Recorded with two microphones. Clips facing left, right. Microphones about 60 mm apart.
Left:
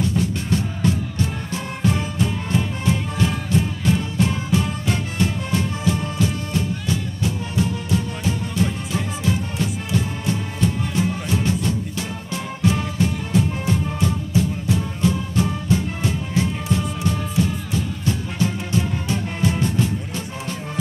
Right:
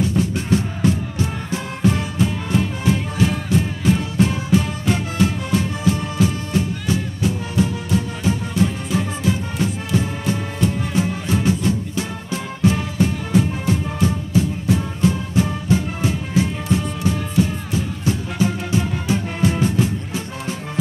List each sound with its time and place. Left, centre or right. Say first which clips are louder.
0.1 s music: right 3 dB; right
8.5 s music: right 3 dB; centre
9.8 s music: right 2 dB; right